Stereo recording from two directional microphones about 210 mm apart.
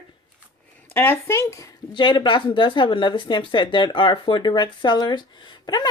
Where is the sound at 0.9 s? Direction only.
10° left (ahead or behind).